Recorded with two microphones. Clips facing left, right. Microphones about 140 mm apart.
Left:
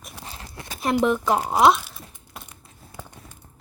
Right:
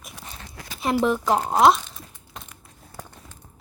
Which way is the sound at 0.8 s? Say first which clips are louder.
Left 1 dB; centre (ahead or behind).